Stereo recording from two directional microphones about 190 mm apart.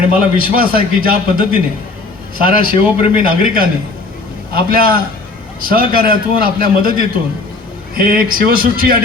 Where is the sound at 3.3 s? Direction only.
50° right (ahead or behind).